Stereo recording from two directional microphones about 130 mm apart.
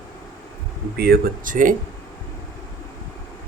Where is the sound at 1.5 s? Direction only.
90° right.